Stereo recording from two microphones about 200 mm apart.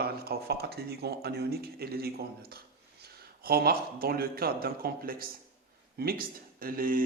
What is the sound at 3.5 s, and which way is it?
Speech, 50° right (ahead or behind).